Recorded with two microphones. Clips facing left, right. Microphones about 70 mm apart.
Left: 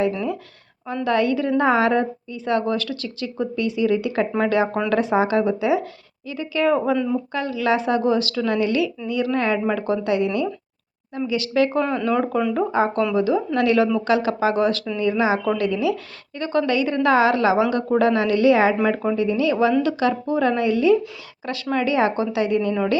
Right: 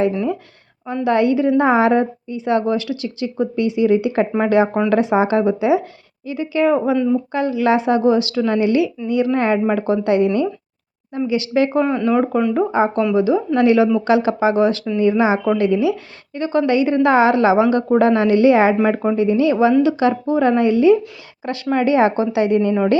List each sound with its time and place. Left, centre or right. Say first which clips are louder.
1.0 s a woman's voice: right 5 dB; right
6.7 s speech: right 4 dB; centre
7.3 s a woman's voice: right 4 dB; right; by 12.5 s centre
12.5 s a woman's voice: right 2 dB; centre